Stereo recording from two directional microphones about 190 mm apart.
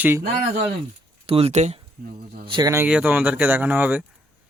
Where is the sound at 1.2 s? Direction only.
30° right (ahead or behind).